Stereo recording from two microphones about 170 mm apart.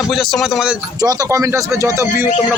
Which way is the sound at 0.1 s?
Centre (ahead or behind).